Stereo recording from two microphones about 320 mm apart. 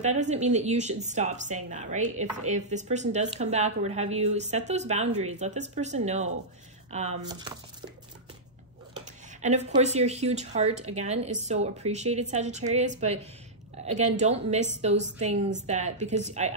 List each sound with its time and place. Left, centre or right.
0.0 s a woman's voice: right
9.4 s a woman's voice: right